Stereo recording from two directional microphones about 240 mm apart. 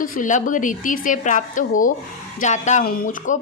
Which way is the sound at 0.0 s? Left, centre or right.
Left.